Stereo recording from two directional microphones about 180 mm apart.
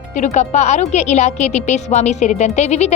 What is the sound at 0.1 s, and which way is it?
A woman's voice, 40° left (ahead or behind).